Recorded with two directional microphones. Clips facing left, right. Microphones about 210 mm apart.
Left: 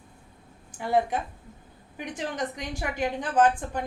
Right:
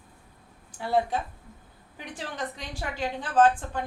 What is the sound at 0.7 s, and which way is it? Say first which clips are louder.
A woman's voice: left 1 dB; 15° left (ahead or behind).